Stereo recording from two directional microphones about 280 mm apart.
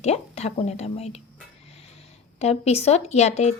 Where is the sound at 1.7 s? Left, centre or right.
Left.